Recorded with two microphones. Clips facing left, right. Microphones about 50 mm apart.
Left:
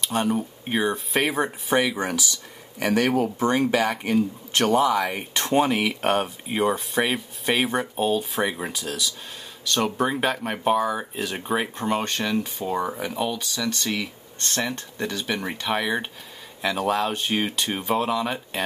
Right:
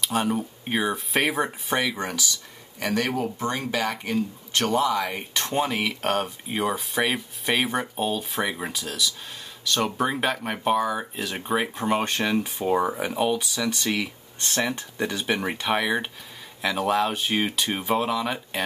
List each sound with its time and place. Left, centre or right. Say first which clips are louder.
0.0 s speech: left 1 dB; centre